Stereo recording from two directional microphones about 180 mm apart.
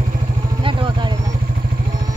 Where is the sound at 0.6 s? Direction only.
25° right (ahead or behind).